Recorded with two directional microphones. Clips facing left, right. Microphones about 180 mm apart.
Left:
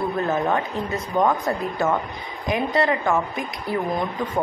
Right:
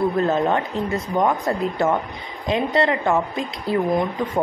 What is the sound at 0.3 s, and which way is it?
Speech, 20° right (ahead or behind).